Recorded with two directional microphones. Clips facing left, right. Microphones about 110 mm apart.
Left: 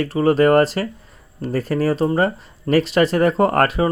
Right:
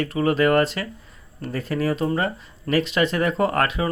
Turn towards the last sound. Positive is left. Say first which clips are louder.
# left 5 dB
turn(degrees=45)  # may be behind; listen again after turning